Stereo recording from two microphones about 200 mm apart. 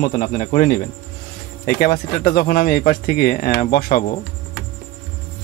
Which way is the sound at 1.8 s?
45° left (ahead or behind).